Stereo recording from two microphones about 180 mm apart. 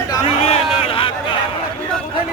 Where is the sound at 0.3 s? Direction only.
35° left (ahead or behind).